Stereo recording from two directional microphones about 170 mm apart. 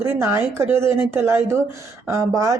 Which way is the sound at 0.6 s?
15° right (ahead or behind).